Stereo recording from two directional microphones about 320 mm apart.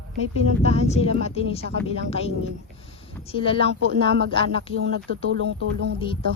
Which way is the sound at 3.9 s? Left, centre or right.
Right.